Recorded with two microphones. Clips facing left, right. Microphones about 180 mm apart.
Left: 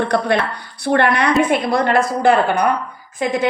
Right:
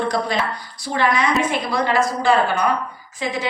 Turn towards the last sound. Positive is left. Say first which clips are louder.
# left 6 dB
turn(degrees=55)  # may be behind; listen again after turning